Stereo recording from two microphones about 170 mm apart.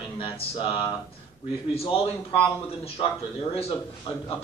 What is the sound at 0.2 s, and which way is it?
Speech, 30° left (ahead or behind).